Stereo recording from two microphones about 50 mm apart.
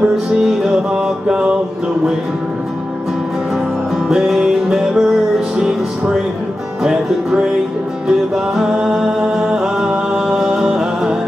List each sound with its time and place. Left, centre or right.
0.0 s music: centre
4.1 s music: centre